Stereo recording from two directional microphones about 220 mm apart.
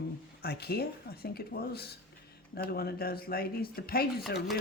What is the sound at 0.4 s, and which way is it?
Speech, 45° left (ahead or behind).